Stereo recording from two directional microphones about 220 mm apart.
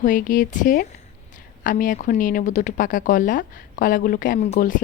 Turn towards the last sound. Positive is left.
turn(degrees=35)  # may be behind; listen again after turning